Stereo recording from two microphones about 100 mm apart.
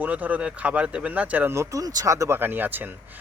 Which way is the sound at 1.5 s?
35° right (ahead or behind).